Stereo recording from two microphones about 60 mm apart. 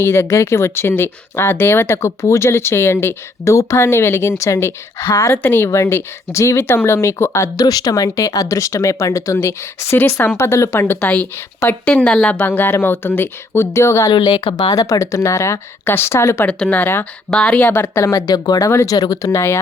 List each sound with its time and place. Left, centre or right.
0.0 s speech: left
5.6 s speech: left
7.5 s speech: left
11.9 s a woman's voice: centre
12.4 s speech: left
14.5 s speech: left
15.9 s speech: left
16.5 s a woman's voice: centre
16.7 s speech: left
17.3 s speech: left
17.9 s speech: left
18.3 s speech: left
19.3 s speech: left